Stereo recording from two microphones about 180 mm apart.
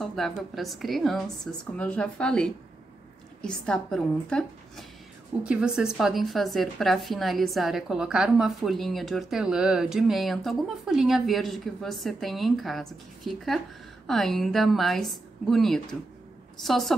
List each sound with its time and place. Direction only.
0.0 s a woman's voice: centre (ahead or behind)